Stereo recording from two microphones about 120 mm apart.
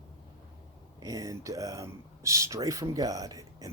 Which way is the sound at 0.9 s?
30° right (ahead or behind).